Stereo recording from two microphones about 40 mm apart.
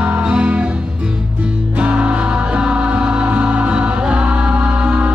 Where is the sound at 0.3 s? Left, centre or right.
Right.